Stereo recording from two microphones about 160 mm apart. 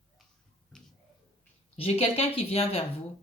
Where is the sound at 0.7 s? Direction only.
5° left (ahead or behind).